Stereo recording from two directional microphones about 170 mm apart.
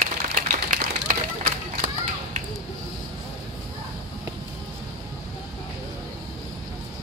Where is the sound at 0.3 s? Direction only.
55° right (ahead or behind).